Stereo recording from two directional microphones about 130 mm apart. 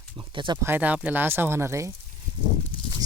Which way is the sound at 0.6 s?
15° right (ahead or behind).